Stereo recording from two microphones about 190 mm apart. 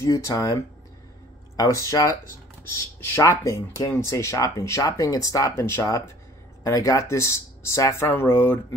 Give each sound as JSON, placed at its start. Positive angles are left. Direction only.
{"t": 0.0, "sound": "speech", "side_deg": 15}